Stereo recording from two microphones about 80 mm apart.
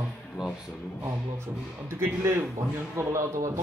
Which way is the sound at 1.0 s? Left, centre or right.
Right.